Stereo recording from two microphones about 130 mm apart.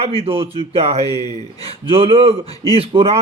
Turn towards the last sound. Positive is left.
turn(degrees=-45)  # may be behind; listen again after turning